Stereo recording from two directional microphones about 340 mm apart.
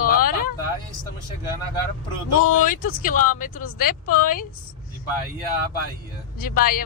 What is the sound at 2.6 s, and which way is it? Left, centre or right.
A woman's voice, left.